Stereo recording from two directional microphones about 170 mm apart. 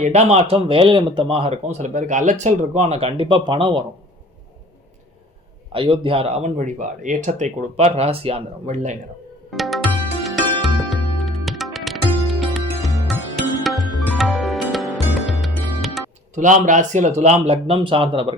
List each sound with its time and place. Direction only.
0.0 s speech: 40° right (ahead or behind)
5.7 s speech: 30° right (ahead or behind)
9.5 s music: centre (ahead or behind)
16.3 s speech: 45° right (ahead or behind); by 18.3 s 30° right (ahead or behind)